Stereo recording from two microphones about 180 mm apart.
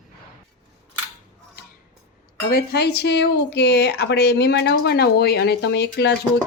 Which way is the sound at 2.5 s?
60° left (ahead or behind).